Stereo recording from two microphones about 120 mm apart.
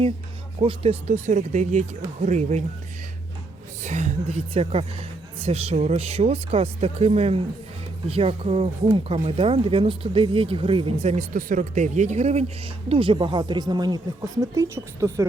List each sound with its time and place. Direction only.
0.6 s speech: 50° right (ahead or behind)
1.0 s speech: 80° right
3.8 s speech: 70° right (ahead or behind)
12.9 s speech: 50° right (ahead or behind)
14.5 s a woman's voice: 25° right (ahead or behind)